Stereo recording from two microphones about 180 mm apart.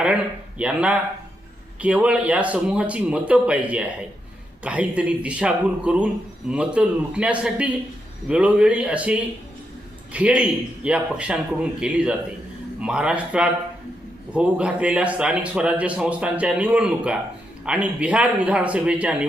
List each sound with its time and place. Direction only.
0.6 s a man's voice: 5° right (ahead or behind)